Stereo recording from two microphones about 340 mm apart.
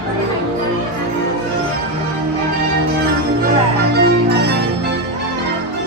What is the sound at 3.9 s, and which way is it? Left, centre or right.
Music, right.